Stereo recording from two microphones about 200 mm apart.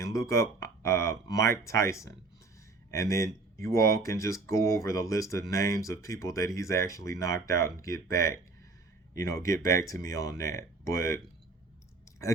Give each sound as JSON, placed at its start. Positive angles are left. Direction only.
{"t": 0.0, "sound": "speech", "side_deg": 15}